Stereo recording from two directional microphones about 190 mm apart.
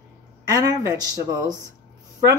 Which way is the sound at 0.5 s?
20° right (ahead or behind).